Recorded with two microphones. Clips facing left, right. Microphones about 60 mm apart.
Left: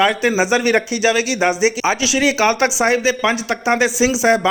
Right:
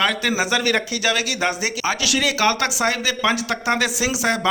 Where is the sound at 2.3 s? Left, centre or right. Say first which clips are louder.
Left 4 dB; left.